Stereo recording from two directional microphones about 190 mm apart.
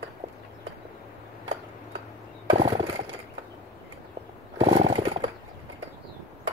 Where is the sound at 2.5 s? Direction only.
25° right (ahead or behind).